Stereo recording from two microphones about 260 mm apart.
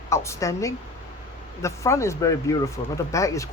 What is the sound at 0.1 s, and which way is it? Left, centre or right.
A man's voice, centre.